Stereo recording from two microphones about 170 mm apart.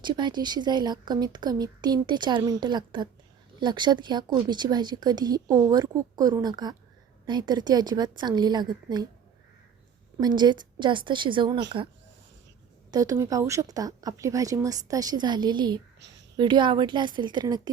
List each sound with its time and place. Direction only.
0.0 s speech: 25° right (ahead or behind)
10.2 s speech: 25° right (ahead or behind)
12.9 s speech: 20° right (ahead or behind)